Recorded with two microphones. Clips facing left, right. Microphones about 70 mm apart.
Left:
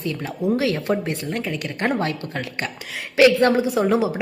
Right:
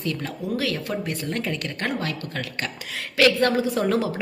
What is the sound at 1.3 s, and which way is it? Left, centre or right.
Speech, centre.